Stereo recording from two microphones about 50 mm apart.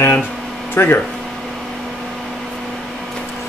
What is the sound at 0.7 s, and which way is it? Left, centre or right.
Speech, left.